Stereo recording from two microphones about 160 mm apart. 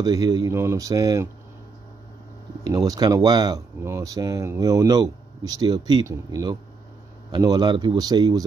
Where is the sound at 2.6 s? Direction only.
20° right (ahead or behind).